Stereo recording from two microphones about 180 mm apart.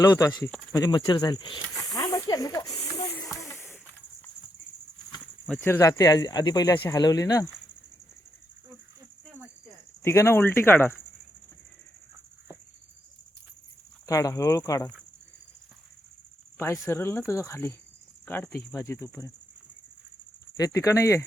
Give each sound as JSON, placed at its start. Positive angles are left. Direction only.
{"t": 0.0, "sound": "speech", "side_deg": 20}
{"t": 1.8, "sound": "snake", "side_deg": 20}
{"t": 3.1, "sound": "a sound", "side_deg": 5}
{"t": 5.5, "sound": "speech", "side_deg": 15}
{"t": 10.0, "sound": "speech", "side_deg": 15}
{"t": 14.1, "sound": "speech", "side_deg": 20}
{"t": 16.8, "sound": "speech", "side_deg": 15}
{"t": 18.8, "sound": "speech", "side_deg": 15}
{"t": 20.6, "sound": "speech", "side_deg": 20}